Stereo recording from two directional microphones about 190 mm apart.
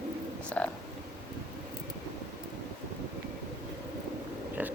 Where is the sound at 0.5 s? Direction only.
10° left (ahead or behind).